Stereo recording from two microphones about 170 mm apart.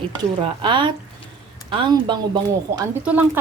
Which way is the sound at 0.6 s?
30° right (ahead or behind).